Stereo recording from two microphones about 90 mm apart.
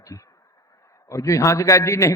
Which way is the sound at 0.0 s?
35° left (ahead or behind).